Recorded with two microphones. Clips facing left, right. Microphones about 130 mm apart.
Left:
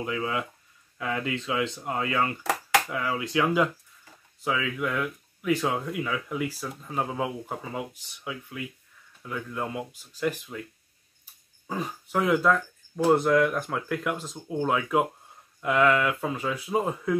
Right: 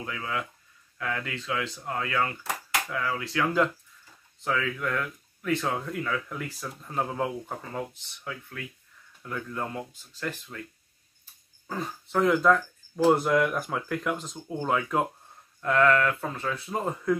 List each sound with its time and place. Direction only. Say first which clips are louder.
0.0 s speech: left 4 dB; 20° left (ahead or behind)
9.2 s speech: left 1 dB; 5° left (ahead or behind)
11.6 s speech: left 2 dB; 10° left (ahead or behind)